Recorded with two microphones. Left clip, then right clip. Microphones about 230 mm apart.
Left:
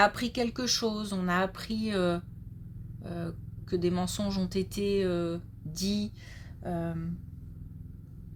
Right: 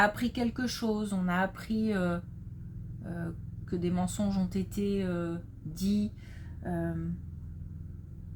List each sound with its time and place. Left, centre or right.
0.0 s speech: left